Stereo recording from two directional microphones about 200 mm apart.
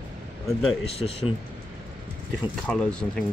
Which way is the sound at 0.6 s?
30° left (ahead or behind).